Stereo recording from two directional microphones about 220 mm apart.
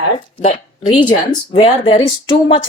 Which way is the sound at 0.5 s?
20° left (ahead or behind).